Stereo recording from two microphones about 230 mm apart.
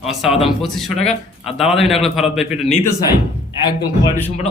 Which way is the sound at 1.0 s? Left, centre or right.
Left.